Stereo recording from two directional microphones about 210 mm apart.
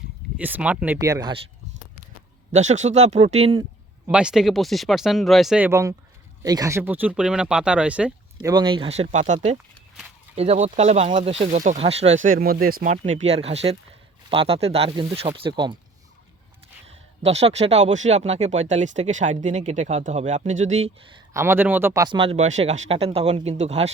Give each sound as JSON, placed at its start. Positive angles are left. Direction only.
{"t": 0.3, "sound": "speech", "side_deg": -5}
{"t": 2.5, "sound": "speech", "side_deg": -35}
{"t": 4.0, "sound": "speech", "side_deg": -5}
{"t": 8.5, "sound": "speech", "side_deg": -25}
{"t": 12.2, "sound": "speech", "side_deg": -40}
{"t": 13.1, "sound": "speech", "side_deg": -30}
{"t": 16.8, "sound": "speech", "side_deg": -30}
{"t": 21.3, "sound": "speech", "side_deg": -10}